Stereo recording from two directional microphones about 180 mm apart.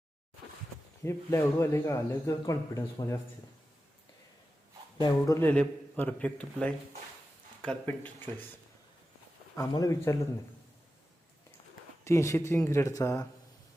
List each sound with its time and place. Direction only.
1.0 s speech: 15° left (ahead or behind)
4.9 s speech: 20° left (ahead or behind)
5.4 s speech: 10° left (ahead or behind)
9.6 s speech: 20° left (ahead or behind)
12.0 s speech: 15° left (ahead or behind)